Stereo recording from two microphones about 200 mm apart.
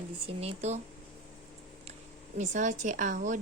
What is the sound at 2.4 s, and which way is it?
A woman's voice, 35° right (ahead or behind).